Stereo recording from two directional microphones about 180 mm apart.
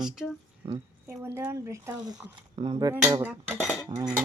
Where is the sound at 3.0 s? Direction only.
15° right (ahead or behind).